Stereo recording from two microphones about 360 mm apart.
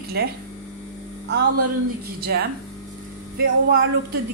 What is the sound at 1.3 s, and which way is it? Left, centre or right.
A woman's voice, right.